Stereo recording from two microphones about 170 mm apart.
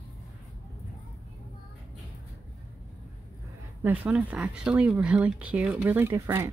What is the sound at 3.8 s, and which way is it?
Speech, 10° right (ahead or behind).